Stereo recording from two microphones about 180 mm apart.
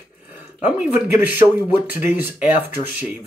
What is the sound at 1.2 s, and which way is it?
Speech, 10° right (ahead or behind).